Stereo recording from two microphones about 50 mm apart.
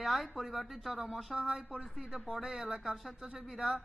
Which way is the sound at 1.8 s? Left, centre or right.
Centre.